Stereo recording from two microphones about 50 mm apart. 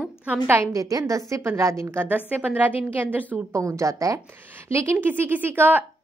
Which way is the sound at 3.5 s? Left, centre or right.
Right.